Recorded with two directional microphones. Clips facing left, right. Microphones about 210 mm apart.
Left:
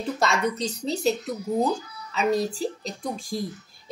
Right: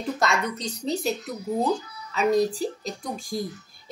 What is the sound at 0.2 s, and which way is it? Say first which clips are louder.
Speech: left 3 dB; centre (ahead or behind).